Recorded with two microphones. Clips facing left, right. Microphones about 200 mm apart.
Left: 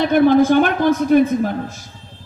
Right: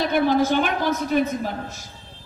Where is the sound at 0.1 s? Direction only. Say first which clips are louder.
Left 9 dB; 50° left (ahead or behind).